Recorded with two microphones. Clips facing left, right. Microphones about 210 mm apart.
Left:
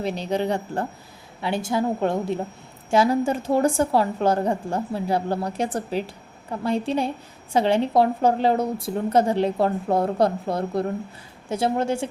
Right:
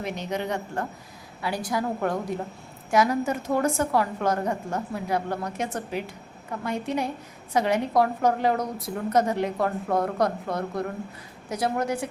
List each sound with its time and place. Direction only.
0.0 s a woman's voice: 30° left (ahead or behind)